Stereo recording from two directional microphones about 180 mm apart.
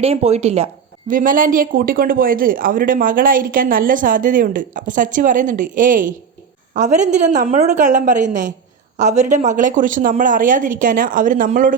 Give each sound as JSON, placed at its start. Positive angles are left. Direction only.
{"t": 0.0, "sound": "speech", "side_deg": -35}
{"t": 1.1, "sound": "speech", "side_deg": -50}